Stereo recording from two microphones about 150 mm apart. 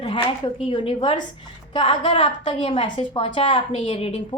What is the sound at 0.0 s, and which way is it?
A woman's voice, 35° left (ahead or behind).